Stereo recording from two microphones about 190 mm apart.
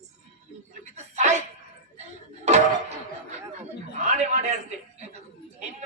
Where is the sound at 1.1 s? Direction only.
35° right (ahead or behind).